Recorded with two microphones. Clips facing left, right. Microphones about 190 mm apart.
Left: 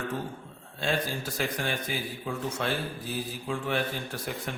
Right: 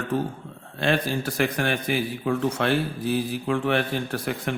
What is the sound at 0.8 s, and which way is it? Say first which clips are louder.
A man's voice: right 6 dB; 65° right (ahead or behind).